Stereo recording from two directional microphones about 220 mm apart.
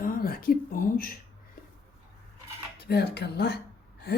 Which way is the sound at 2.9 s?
45° left (ahead or behind).